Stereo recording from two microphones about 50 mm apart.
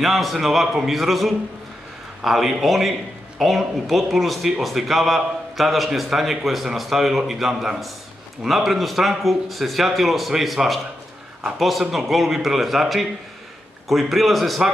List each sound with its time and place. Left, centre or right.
0.0 s speech: centre